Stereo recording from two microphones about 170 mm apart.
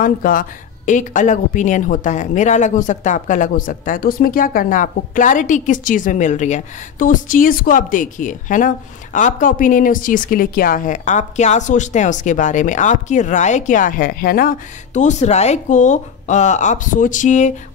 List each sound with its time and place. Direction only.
0.0 s speech: 55° left (ahead or behind)
15.0 s speech: 45° left (ahead or behind)